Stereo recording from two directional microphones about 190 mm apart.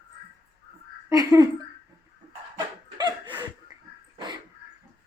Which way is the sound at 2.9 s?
20° right (ahead or behind).